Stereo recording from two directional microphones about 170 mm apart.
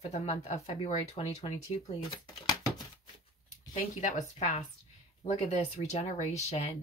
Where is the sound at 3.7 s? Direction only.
45° left (ahead or behind).